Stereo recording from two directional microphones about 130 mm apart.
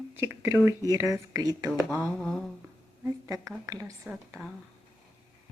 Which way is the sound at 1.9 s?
5° left (ahead or behind).